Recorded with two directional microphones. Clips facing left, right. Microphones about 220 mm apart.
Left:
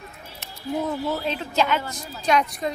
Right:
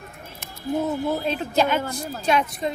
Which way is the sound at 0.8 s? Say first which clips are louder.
Right 2 dB; 10° right (ahead or behind).